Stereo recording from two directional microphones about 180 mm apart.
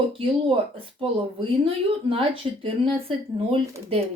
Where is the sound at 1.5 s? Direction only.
30° right (ahead or behind).